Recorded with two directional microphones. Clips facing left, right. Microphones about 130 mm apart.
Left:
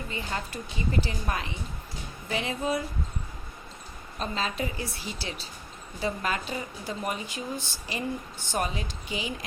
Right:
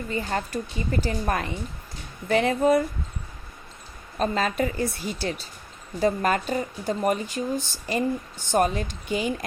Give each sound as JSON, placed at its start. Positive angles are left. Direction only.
{"t": 0.1, "sound": "speech", "side_deg": -45}
{"t": 4.2, "sound": "speech", "side_deg": -50}